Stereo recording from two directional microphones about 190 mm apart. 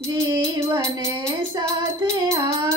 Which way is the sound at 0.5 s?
15° right (ahead or behind).